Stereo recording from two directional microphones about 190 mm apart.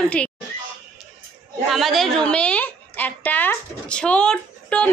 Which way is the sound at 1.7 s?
Centre (ahead or behind).